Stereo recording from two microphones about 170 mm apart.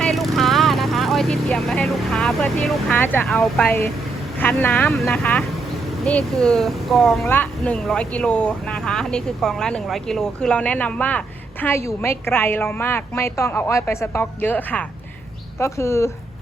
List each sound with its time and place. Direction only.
0.0 s vehicle: centre (ahead or behind)
3.0 s a woman's voice: 10° left (ahead or behind)